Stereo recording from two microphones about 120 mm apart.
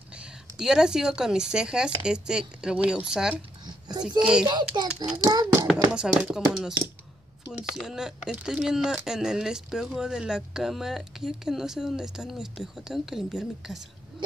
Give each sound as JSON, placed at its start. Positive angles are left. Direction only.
{"t": 0.2, "sound": "speech", "side_deg": -5}
{"t": 4.5, "sound": "a child's voice", "side_deg": -40}
{"t": 5.7, "sound": "speech", "side_deg": -5}